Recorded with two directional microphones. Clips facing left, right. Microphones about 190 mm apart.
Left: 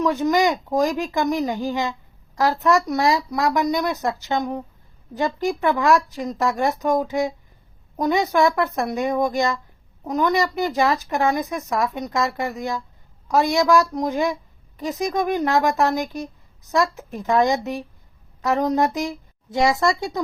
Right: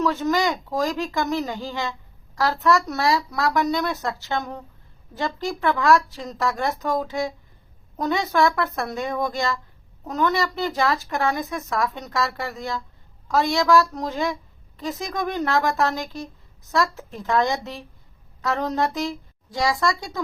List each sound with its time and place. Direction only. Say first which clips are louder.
0.0 s a woman's voice: left 3 dB; 15° left (ahead or behind)